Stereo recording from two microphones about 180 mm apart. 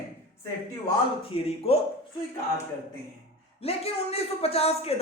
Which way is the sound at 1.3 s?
30° left (ahead or behind).